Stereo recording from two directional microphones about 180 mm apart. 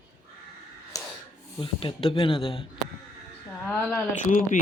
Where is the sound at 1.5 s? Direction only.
30° left (ahead or behind).